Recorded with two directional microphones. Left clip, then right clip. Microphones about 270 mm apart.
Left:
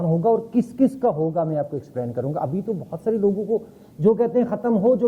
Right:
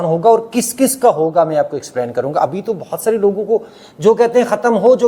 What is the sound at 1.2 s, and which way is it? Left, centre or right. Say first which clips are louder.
A man's voice: right 10 dB; right.